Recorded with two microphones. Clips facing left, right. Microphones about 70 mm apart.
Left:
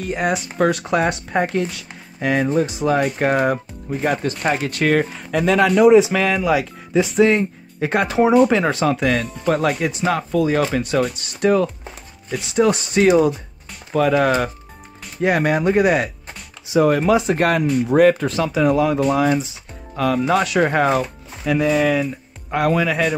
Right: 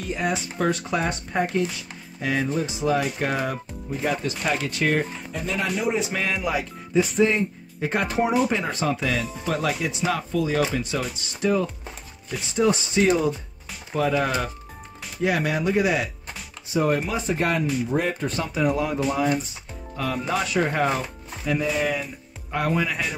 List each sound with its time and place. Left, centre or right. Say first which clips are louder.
0.0 s speech: left 5 dB; left
8.5 s speech: left 7 dB; left
11.1 s speech: left 3 dB; left
13.9 s speech: left 6 dB; left
15.2 s speech: left 6 dB; left
16.6 s speech: left 7 dB; left
20.0 s speech: left 8 dB; left
21.5 s speech: left 7 dB; left